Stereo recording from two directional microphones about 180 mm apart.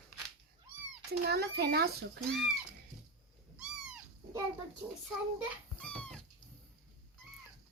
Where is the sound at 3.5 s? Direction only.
5° right (ahead or behind).